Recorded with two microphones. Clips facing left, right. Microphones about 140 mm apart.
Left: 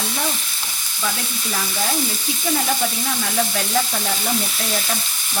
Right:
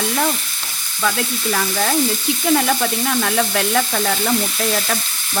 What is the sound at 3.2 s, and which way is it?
Sizzle, 70° right (ahead or behind).